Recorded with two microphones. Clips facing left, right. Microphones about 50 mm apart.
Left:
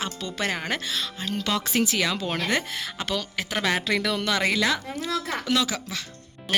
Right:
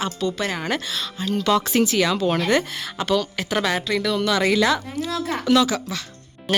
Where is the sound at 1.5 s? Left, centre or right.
Centre.